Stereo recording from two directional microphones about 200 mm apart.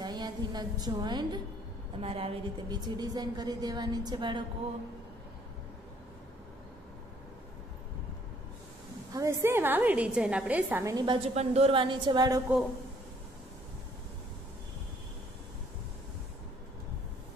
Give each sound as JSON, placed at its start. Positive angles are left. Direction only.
{"t": 0.0, "sound": "a woman's voice", "side_deg": -20}
{"t": 9.1, "sound": "a woman's voice", "side_deg": -15}
{"t": 11.3, "sound": "a woman's voice", "side_deg": -30}